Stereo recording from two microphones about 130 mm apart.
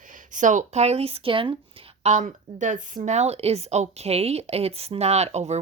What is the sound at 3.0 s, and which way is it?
Speech, 55° right (ahead or behind).